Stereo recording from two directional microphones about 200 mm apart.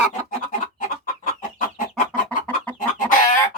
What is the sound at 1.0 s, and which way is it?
Chicken, 40° left (ahead or behind).